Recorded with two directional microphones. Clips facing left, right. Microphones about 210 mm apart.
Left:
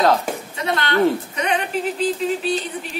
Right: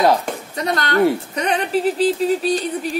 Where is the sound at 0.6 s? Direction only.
40° right (ahead or behind).